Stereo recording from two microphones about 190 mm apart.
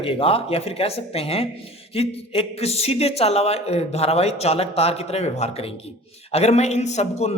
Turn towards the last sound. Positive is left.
turn(degrees=35)  # may be behind; listen again after turning